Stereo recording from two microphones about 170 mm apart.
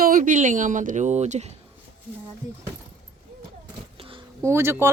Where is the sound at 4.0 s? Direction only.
30° right (ahead or behind).